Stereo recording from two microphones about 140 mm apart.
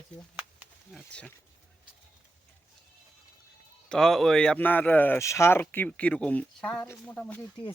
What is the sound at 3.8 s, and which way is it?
Speech, 5° left (ahead or behind).